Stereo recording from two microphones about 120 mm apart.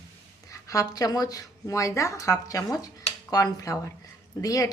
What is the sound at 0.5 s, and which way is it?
Speech, 30° left (ahead or behind).